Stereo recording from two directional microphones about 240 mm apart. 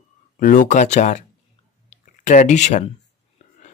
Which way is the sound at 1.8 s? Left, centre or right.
Left.